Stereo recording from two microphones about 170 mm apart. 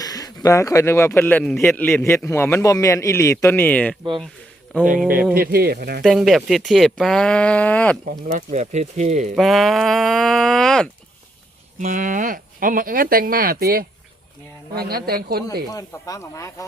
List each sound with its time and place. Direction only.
0.0 s a man's voice: 20° left (ahead or behind)
5.3 s speech: 60° right (ahead or behind)
6.0 s speech: centre (ahead or behind)
8.4 s speech: 45° right (ahead or behind)
9.3 s speech: centre (ahead or behind)
11.8 s speech: 50° right (ahead or behind)
15.7 s speech: 20° left (ahead or behind)